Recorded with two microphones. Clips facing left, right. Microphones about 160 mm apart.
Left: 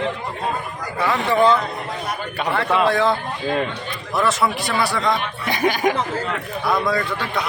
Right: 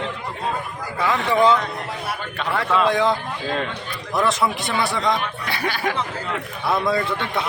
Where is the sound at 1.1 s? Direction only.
10° left (ahead or behind).